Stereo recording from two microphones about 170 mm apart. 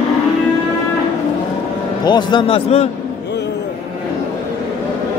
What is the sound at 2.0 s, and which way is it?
Speech, 25° left (ahead or behind).